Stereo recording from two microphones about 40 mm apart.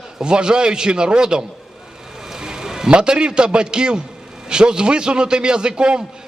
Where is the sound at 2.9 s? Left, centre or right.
Right.